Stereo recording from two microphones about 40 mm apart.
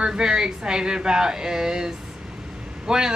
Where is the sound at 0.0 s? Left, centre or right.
Centre.